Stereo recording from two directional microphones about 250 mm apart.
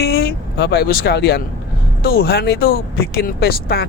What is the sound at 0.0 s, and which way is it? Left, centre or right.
Speech, left.